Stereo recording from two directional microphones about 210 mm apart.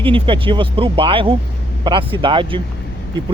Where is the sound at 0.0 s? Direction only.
25° right (ahead or behind).